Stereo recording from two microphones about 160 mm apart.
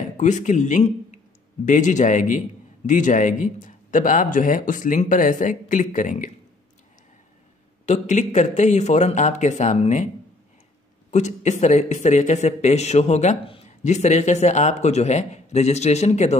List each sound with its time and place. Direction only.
0.2 s speech: 50° left (ahead or behind)
7.8 s speech: 50° left (ahead or behind)
11.1 s speech: 45° left (ahead or behind)